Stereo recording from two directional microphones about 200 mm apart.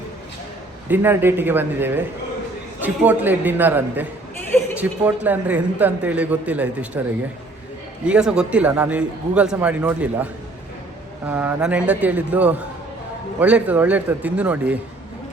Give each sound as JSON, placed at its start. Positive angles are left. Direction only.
{"t": 0.9, "sound": "a man's voice", "side_deg": -10}
{"t": 4.4, "sound": "a sound", "side_deg": 10}
{"t": 4.8, "sound": "a man's voice", "side_deg": -10}
{"t": 8.0, "sound": "a man's voice", "side_deg": -5}
{"t": 11.3, "sound": "a man's voice", "side_deg": -10}